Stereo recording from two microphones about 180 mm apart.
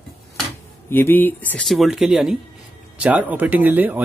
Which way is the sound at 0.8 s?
10° left (ahead or behind).